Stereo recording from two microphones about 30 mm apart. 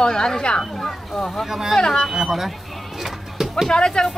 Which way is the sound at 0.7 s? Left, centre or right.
Centre.